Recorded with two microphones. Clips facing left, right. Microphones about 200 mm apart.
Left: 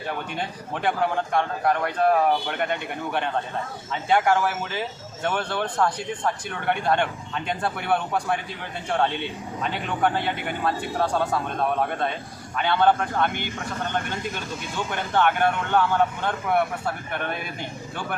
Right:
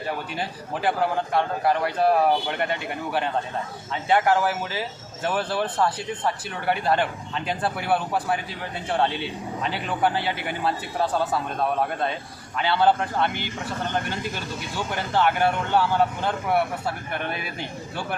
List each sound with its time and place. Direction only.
0.3 s speech: 5° right (ahead or behind)
9.6 s speech: 5° right (ahead or behind)
12.5 s speech: 5° right (ahead or behind)
14.9 s speech: 5° right (ahead or behind)